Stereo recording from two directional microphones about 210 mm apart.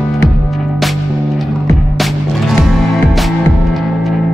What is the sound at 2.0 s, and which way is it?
Music, centre (ahead or behind).